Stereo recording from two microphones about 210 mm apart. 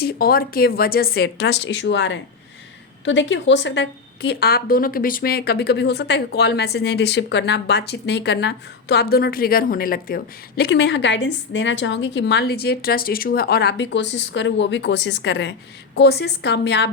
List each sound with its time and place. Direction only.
0.0 s a woman's voice: 45° left (ahead or behind)